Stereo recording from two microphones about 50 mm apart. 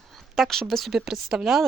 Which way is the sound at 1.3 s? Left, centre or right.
Centre.